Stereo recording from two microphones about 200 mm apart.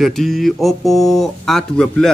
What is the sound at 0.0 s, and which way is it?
Speech, centre (ahead or behind).